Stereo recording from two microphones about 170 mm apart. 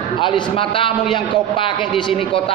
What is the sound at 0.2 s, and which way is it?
A man's voice, 30° left (ahead or behind).